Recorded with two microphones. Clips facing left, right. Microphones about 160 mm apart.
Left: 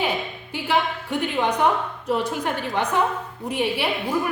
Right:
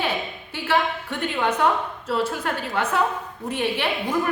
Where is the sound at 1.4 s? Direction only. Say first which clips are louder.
Even; 15° left (ahead or behind).